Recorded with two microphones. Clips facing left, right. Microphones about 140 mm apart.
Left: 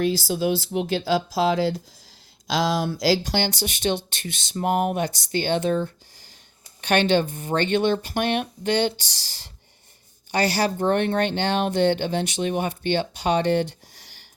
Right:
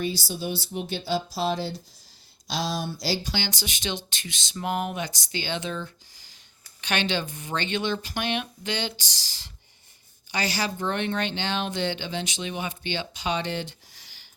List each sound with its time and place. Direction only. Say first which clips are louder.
0.0 s speech: left 7 dB; 90° left; by 8.9 s 55° left (ahead or behind)
10.3 s speech: left 6 dB; 55° left (ahead or behind)